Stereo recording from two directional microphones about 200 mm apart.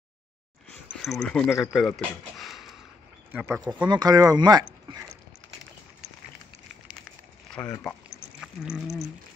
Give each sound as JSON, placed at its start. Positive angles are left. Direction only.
{"t": 1.0, "sound": "speech", "side_deg": 0}
{"t": 7.4, "sound": "a sound", "side_deg": 5}
{"t": 8.4, "sound": "speech", "side_deg": -5}